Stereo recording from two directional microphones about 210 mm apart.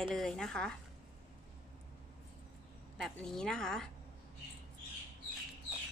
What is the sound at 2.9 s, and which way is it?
Speech, 5° left (ahead or behind).